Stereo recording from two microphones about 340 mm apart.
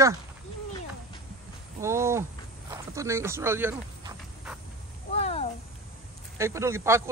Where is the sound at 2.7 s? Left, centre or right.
Centre.